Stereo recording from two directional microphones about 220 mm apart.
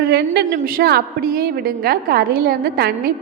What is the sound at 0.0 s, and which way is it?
A woman's voice, 45° right (ahead or behind).